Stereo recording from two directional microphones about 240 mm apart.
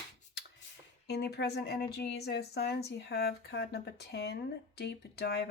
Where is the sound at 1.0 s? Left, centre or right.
Left.